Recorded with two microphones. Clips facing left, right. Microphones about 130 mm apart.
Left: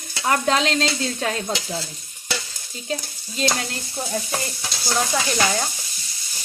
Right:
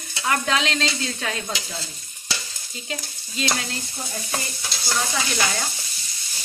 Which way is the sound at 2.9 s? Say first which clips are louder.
Left 5 dB; 45° left (ahead or behind).